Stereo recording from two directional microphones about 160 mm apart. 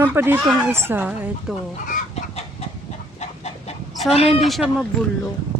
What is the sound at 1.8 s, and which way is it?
Chicken, 55° left (ahead or behind).